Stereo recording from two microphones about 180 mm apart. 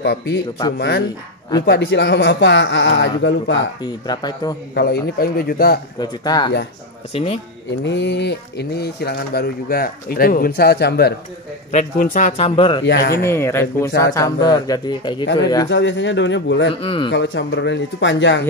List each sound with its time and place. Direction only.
0.0 s a man's voice: 70° left (ahead or behind)
3.8 s speech: 25° left (ahead or behind)
4.7 s speech: 60° left (ahead or behind)
5.9 s speech: 25° left (ahead or behind)
7.8 s speech: 75° left (ahead or behind)
11.7 s speech: 45° left (ahead or behind)
12.8 s speech: 65° left (ahead or behind)
13.2 s speech: 15° left (ahead or behind)
15.7 s a man's voice: 80° left
16.8 s speech: 30° left (ahead or behind)
17.1 s a man's voice: 80° left